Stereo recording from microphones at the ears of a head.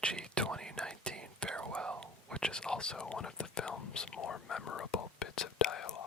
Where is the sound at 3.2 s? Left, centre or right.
Left.